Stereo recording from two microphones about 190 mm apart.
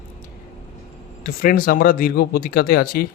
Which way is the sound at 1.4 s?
50° left (ahead or behind).